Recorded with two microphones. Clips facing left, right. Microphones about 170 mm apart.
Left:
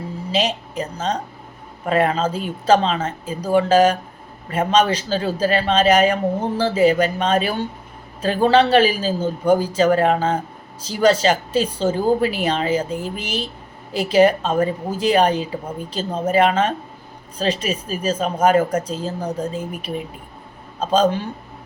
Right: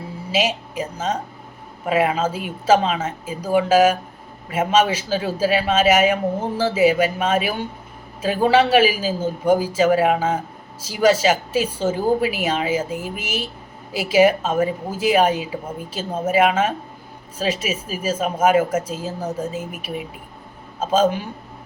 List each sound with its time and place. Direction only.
0.3 s a woman's voice: 10° right (ahead or behind)